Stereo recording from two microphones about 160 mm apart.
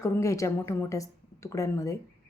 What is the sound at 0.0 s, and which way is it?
Speech, 20° left (ahead or behind).